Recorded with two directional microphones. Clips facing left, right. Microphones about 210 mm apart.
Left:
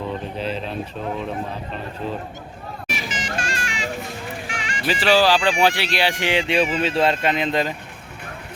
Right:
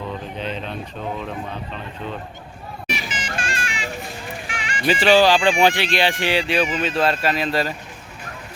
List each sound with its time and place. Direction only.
0.3 s speech: 5° left (ahead or behind)
3.2 s vehicle: 40° left (ahead or behind)
4.4 s music: 45° left (ahead or behind)
4.8 s speech: centre (ahead or behind); by 7.7 s 20° left (ahead or behind)